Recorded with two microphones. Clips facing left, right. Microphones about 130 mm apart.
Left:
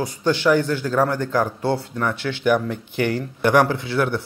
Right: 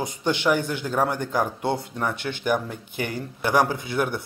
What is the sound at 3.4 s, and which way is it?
Speech, 10° right (ahead or behind).